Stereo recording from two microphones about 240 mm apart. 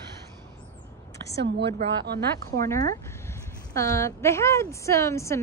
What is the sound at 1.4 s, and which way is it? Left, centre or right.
Speech, right.